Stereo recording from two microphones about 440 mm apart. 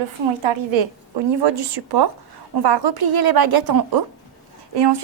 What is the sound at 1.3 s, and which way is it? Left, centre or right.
A woman's voice, right.